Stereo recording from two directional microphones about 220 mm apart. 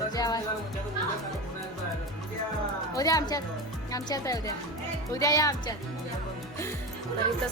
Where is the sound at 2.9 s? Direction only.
15° left (ahead or behind).